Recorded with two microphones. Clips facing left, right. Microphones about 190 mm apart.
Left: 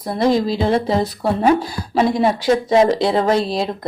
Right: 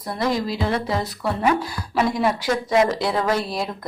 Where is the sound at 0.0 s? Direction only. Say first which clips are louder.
Left 7 dB; 25° left (ahead or behind).